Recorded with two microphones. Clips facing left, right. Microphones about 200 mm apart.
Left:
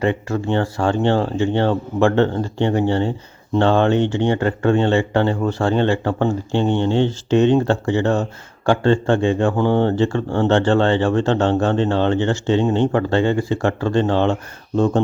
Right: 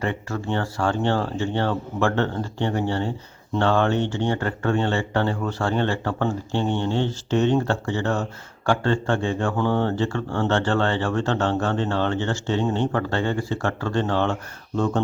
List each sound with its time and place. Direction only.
0.0 s speech: 20° left (ahead or behind)